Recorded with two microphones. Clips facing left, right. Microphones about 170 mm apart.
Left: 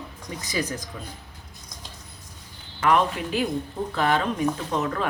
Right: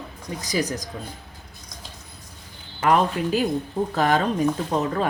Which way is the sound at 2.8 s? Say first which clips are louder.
Right 2 dB; 40° right (ahead or behind).